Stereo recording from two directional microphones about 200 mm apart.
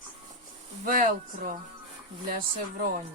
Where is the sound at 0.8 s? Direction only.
45° right (ahead or behind).